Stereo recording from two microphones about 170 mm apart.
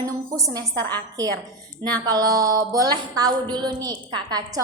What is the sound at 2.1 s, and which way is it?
A woman's voice, 20° right (ahead or behind).